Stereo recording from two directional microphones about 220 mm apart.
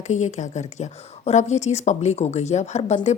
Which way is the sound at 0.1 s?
30° left (ahead or behind).